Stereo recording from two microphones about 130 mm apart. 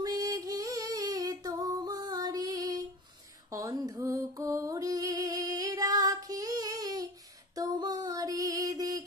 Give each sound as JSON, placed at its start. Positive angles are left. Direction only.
{"t": 0.0, "sound": "female singing", "side_deg": -30}
{"t": 3.4, "sound": "music", "side_deg": -25}
{"t": 7.5, "sound": "a sound", "side_deg": -30}